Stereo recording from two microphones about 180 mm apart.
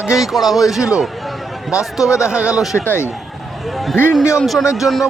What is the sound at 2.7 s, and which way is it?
Speech, 15° left (ahead or behind).